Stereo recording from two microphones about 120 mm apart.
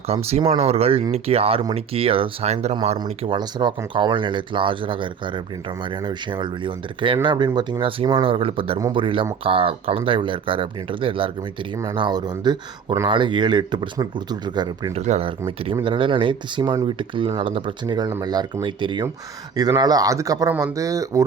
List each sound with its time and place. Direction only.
0.1 s speech: 60° right (ahead or behind)
3.3 s speech: 40° right (ahead or behind)
14.9 s speech: 65° right (ahead or behind)
15.4 s speech: 45° right (ahead or behind); by 21.2 s 30° right (ahead or behind)